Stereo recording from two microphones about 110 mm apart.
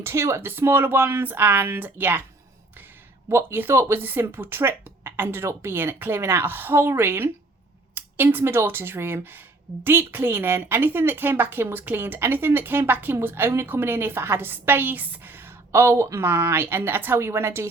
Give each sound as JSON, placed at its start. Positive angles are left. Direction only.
{"t": 0.0, "sound": "a woman's voice", "side_deg": -25}
{"t": 3.2, "sound": "a woman's voice", "side_deg": -20}